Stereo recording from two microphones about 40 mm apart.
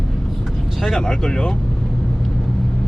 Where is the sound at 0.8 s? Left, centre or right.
Centre.